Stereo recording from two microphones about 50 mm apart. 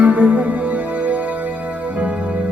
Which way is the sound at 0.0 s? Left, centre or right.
Right.